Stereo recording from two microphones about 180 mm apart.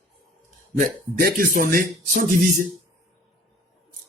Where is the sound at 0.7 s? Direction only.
50° right (ahead or behind).